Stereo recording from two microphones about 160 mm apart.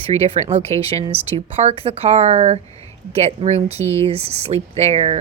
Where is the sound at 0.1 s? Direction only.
40° right (ahead or behind).